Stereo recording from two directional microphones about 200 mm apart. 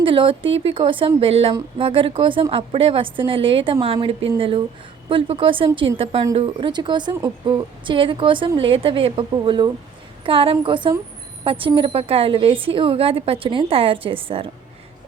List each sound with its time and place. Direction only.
0.0 s a woman's voice: 25° right (ahead or behind)